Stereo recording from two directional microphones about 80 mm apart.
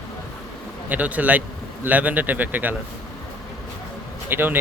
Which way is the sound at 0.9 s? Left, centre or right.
Centre.